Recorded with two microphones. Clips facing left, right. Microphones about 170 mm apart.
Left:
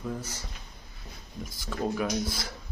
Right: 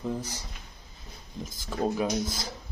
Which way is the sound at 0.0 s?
15° right (ahead or behind).